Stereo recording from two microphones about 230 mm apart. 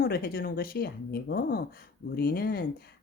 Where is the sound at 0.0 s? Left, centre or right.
Left.